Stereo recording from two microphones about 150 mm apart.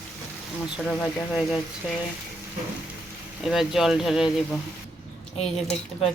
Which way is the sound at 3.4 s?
Centre (ahead or behind).